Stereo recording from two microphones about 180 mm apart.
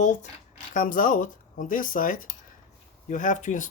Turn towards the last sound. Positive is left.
turn(degrees=45)  # may be behind; listen again after turning